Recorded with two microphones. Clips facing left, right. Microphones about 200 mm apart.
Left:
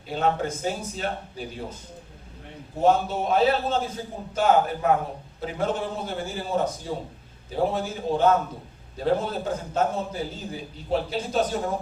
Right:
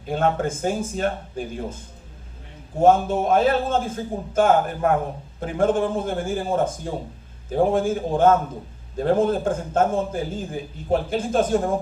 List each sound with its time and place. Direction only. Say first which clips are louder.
0.0 s a man's voice: right 3 dB; 50° right (ahead or behind)